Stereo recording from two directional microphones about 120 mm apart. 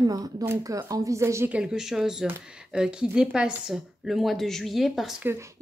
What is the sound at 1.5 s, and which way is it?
A woman's voice, 5° right (ahead or behind).